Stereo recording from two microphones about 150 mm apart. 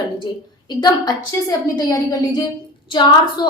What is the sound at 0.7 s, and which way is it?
A woman's voice, 30° left (ahead or behind).